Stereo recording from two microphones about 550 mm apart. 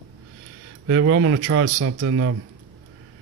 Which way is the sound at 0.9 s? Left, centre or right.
Right.